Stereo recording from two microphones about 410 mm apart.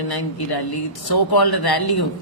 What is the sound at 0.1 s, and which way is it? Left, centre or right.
Speech, left.